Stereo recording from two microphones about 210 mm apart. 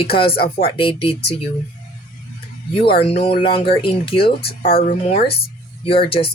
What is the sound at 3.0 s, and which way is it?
Speech, 30° left (ahead or behind).